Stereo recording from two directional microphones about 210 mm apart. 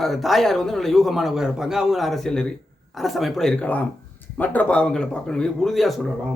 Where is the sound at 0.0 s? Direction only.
Centre (ahead or behind).